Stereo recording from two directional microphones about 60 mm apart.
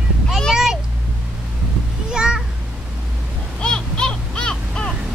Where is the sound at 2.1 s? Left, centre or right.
Centre.